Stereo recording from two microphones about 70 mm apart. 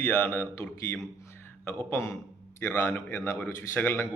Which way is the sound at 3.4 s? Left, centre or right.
Left.